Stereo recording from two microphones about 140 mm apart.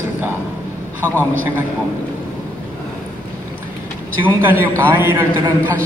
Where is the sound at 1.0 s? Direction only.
15° left (ahead or behind).